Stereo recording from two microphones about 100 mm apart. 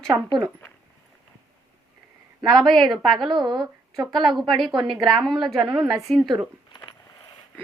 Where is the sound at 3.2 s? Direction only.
50° right (ahead or behind).